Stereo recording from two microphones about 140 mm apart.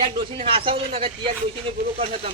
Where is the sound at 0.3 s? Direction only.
40° right (ahead or behind).